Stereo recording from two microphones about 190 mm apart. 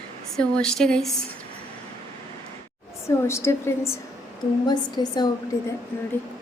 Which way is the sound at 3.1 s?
15° left (ahead or behind).